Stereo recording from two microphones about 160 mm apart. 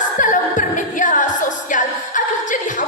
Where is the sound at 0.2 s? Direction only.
55° left (ahead or behind).